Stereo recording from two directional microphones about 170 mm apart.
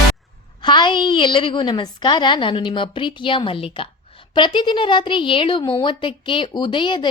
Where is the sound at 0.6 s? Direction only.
25° left (ahead or behind).